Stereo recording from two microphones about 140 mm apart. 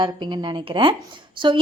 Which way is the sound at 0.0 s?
35° right (ahead or behind).